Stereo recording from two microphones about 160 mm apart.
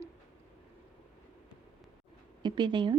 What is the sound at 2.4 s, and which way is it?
Speech, 30° right (ahead or behind).